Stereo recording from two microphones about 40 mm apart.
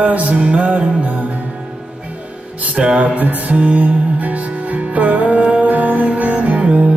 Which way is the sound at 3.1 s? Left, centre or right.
Right.